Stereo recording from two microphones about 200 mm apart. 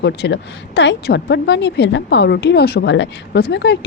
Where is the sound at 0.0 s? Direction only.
60° left (ahead or behind).